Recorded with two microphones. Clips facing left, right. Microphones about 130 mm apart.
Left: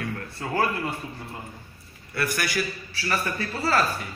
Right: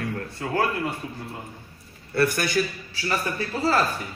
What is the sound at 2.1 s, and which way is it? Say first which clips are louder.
A man's voice: right 5 dB; 30° right (ahead or behind).